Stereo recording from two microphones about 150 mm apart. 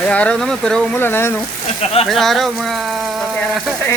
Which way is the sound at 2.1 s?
Centre (ahead or behind).